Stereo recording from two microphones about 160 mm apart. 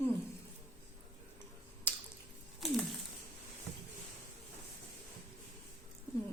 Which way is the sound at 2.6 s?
Centre (ahead or behind).